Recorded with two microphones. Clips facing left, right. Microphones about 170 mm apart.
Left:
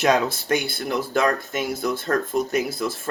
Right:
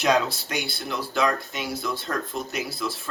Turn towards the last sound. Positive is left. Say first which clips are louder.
# left 6 dB
turn(degrees=50)  # may be behind; listen again after turning